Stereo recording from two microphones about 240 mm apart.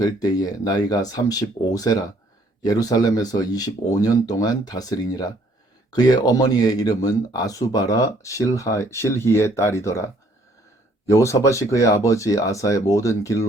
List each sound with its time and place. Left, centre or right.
0.0 s speech: centre